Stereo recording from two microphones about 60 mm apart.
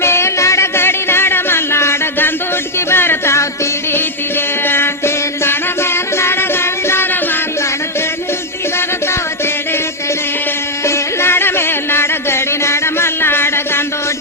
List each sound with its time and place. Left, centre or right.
0.0 s music: left
4.6 s music: left
10.8 s music: left